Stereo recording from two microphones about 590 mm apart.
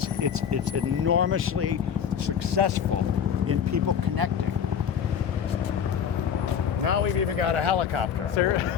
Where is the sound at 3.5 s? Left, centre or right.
Right.